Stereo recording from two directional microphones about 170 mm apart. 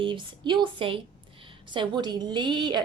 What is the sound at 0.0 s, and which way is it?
A woman's voice, 30° right (ahead or behind).